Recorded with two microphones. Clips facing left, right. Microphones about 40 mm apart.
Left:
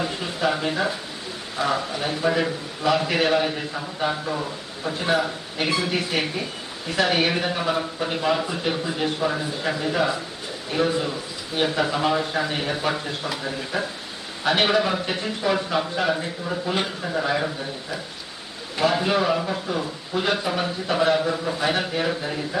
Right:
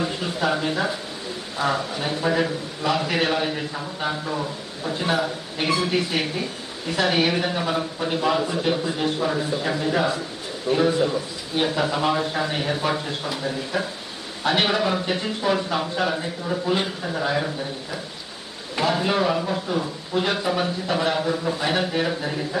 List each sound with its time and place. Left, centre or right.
0.0 s speech: centre
2.0 s a man's voice: centre
5.0 s a man's voice: centre
7.1 s a man's voice: centre
14.4 s a man's voice: centre
18.9 s a man's voice: centre